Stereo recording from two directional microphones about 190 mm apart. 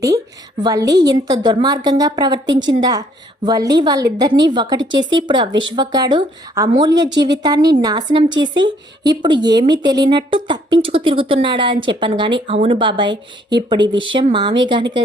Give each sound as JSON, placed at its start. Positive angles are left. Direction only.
{"t": 0.6, "sound": "a woman's voice", "side_deg": -20}